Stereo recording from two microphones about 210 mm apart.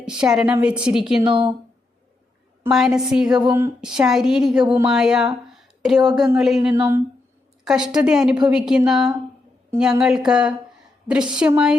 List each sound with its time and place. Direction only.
0.0 s a woman's voice: 5° right (ahead or behind)
1.2 s speech: 25° right (ahead or behind)
2.6 s a woman's voice: centre (ahead or behind)
6.7 s speech: 15° right (ahead or behind)
7.6 s a woman's voice: 5° right (ahead or behind)